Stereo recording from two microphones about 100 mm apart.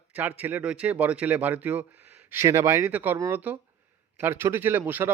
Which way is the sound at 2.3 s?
30° right (ahead or behind).